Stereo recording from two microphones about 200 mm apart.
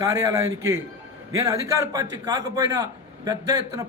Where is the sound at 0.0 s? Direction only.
15° right (ahead or behind).